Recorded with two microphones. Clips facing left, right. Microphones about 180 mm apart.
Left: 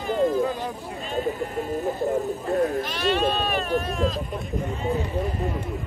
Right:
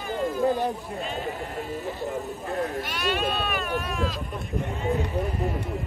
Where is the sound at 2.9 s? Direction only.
35° left (ahead or behind).